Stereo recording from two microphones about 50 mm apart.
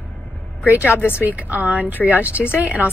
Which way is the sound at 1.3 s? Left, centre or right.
Right.